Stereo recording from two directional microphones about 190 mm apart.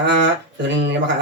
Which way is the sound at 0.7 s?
70° right (ahead or behind).